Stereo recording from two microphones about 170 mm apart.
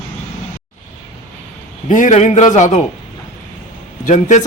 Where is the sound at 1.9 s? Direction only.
50° left (ahead or behind).